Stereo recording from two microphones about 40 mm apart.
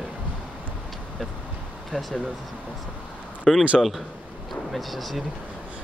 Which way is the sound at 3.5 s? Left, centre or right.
Centre.